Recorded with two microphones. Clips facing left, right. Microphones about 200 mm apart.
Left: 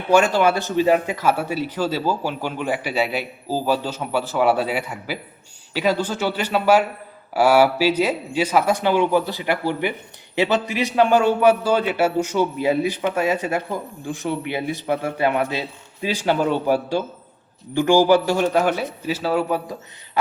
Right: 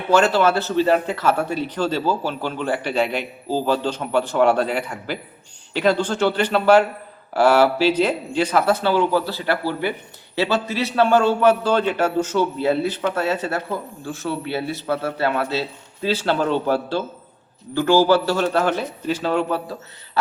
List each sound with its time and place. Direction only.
0.1 s a man's voice: 10° left (ahead or behind)